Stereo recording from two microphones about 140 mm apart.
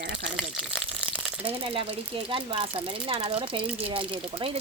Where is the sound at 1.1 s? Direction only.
10° right (ahead or behind).